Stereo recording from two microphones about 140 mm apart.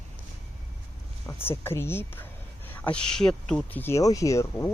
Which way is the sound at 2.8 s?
5° left (ahead or behind).